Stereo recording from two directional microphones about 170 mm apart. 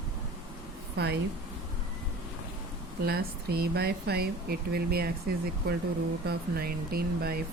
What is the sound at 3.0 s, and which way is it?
Speech, 65° right (ahead or behind).